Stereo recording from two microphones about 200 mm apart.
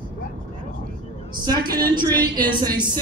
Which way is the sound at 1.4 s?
20° right (ahead or behind).